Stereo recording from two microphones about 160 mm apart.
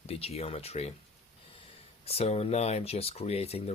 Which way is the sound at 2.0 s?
40° left (ahead or behind).